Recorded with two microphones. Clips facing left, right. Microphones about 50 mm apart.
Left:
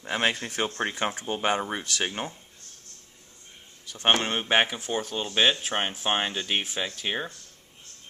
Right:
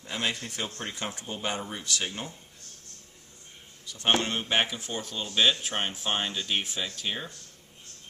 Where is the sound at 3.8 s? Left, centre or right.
Left.